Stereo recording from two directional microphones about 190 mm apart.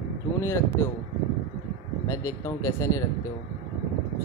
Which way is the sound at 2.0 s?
15° left (ahead or behind).